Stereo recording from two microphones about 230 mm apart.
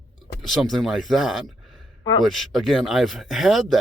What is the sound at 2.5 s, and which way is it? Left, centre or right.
Speech, centre.